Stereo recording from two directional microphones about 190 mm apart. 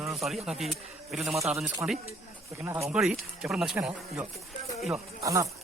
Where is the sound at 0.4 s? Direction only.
Centre (ahead or behind).